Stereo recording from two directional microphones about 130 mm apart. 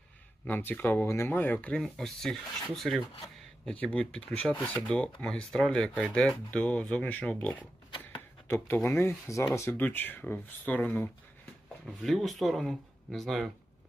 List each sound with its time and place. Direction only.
0.4 s speech: 15° left (ahead or behind)
7.9 s a sound: 40° left (ahead or behind)
8.4 s speech: 15° left (ahead or behind)
12.0 s speech: centre (ahead or behind)